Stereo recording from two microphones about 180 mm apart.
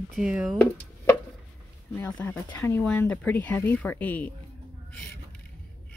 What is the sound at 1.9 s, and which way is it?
Speech, 10° left (ahead or behind).